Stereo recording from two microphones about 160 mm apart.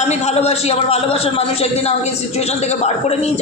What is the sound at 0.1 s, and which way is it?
A man's voice, 40° left (ahead or behind).